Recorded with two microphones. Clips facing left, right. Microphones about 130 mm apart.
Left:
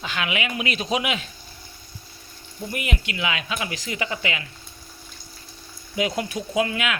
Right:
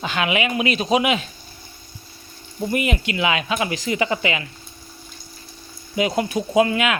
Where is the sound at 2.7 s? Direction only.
25° right (ahead or behind).